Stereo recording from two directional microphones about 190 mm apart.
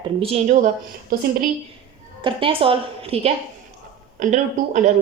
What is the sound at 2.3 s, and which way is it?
A woman's voice, 25° right (ahead or behind).